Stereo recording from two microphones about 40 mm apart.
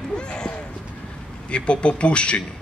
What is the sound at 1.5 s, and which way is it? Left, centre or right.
Speech, left.